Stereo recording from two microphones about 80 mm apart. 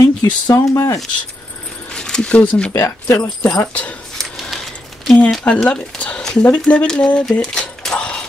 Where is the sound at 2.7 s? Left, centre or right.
Left.